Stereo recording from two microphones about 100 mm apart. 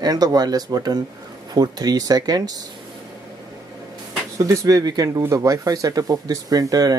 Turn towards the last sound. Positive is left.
turn(degrees=-40)  # may be behind; listen again after turning